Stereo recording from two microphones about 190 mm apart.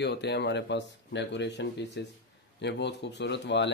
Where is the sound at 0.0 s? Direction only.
60° left (ahead or behind).